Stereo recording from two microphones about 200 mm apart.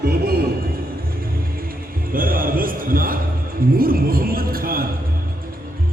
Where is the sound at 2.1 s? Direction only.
45° right (ahead or behind).